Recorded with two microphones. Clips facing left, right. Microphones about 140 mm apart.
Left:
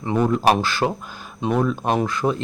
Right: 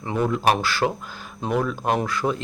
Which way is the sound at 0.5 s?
20° left (ahead or behind).